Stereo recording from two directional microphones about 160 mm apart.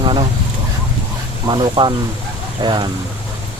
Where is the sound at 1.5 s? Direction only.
30° right (ahead or behind).